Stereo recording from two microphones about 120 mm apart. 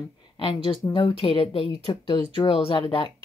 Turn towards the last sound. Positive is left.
turn(degrees=45)  # may be behind; listen again after turning